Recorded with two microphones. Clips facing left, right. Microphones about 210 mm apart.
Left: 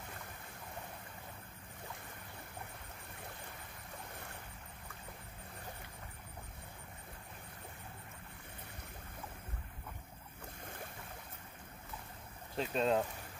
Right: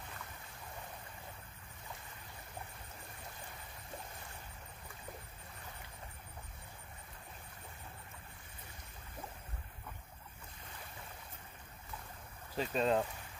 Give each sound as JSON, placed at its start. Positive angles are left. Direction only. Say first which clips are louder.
{"t": 10.6, "sound": "boat", "louder": "left 5 dB", "side_deg": 50}
{"t": 12.5, "sound": "speech", "louder": "even", "side_deg": 0}